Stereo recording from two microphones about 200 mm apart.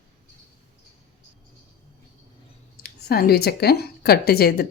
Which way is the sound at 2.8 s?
50° left (ahead or behind).